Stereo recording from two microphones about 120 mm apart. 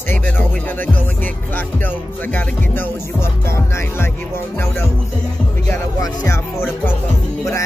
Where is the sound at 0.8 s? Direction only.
15° left (ahead or behind).